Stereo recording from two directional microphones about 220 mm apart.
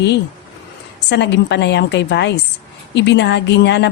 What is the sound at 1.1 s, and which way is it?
A woman's voice, 50° left (ahead or behind).